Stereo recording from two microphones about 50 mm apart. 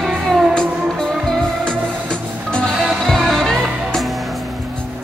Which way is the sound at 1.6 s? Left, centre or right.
Centre.